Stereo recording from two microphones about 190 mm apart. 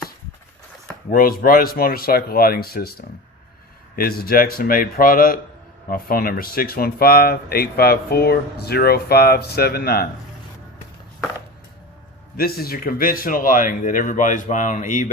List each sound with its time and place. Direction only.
1.1 s speech: 50° left (ahead or behind)
3.9 s speech: 50° left (ahead or behind)
12.4 s speech: 50° left (ahead or behind)